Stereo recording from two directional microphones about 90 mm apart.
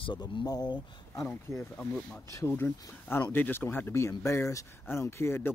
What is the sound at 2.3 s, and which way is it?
Speech, 30° left (ahead or behind).